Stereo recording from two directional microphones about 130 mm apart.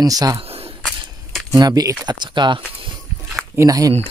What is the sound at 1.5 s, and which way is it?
Speech, 30° right (ahead or behind).